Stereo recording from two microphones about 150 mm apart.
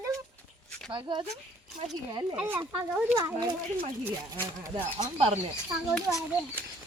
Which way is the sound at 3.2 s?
25° right (ahead or behind).